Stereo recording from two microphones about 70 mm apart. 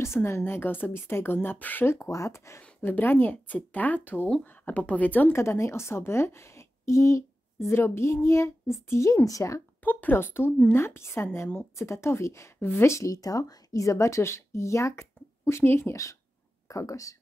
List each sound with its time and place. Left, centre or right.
0.0 s a woman's voice: left
2.0 s a woman's voice: left
2.8 s speech: left
5.3 s a woman's voice: left
9.8 s a woman's voice: left
16.6 s speech: left